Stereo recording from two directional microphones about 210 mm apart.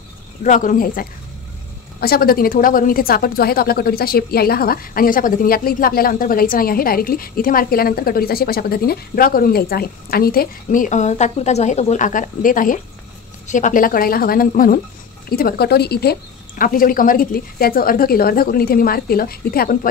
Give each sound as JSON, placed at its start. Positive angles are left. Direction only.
{"t": 0.4, "sound": "speech", "side_deg": 35}